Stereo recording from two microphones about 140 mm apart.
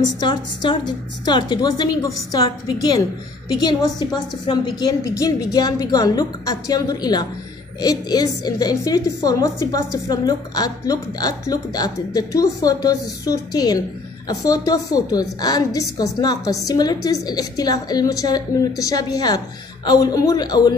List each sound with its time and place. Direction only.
0.2 s a woman's voice: 30° left (ahead or behind)
3.5 s a woman's voice: 30° left (ahead or behind)